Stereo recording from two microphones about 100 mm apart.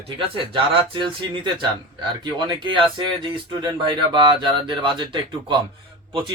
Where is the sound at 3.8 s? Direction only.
50° right (ahead or behind).